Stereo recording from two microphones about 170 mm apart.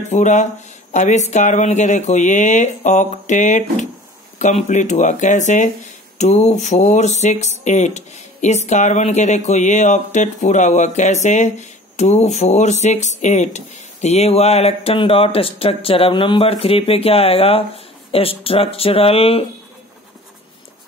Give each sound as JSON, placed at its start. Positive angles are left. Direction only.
{"t": 0.1, "sound": "speech", "side_deg": 45}